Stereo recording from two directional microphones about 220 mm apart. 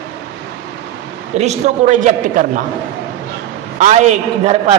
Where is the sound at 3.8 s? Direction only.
30° right (ahead or behind).